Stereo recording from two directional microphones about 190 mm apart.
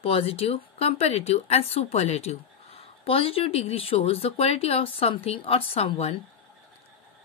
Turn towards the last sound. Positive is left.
turn(degrees=30)  # may be behind; listen again after turning